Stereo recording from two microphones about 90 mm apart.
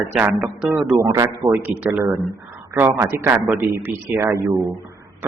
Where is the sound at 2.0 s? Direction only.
30° right (ahead or behind).